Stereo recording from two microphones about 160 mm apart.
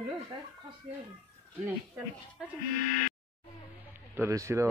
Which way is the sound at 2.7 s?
55° left (ahead or behind).